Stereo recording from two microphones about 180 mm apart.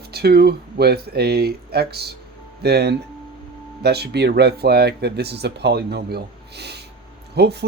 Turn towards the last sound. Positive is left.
turn(degrees=-65)  # may be behind; listen again after turning